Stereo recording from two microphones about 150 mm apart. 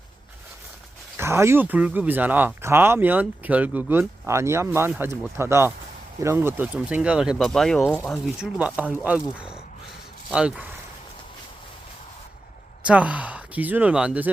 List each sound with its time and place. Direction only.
1.1 s speech: 15° right (ahead or behind); by 8.2 s 5° left (ahead or behind)
8.4 s speech: 10° right (ahead or behind)
12.8 s speech: 10° right (ahead or behind)